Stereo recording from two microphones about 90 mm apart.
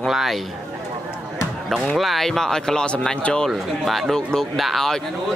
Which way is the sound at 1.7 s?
Centre (ahead or behind).